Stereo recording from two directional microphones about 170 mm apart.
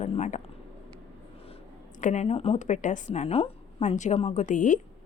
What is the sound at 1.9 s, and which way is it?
A woman's voice, 45° left (ahead or behind).